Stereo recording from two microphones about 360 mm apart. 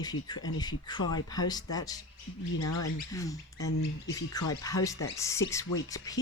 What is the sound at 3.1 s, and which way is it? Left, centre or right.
Speech, centre.